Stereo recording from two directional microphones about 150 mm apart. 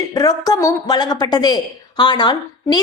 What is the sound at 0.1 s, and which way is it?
A woman's voice, 25° left (ahead or behind).